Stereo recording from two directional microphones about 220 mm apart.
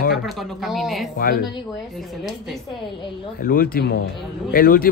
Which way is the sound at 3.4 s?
40° left (ahead or behind).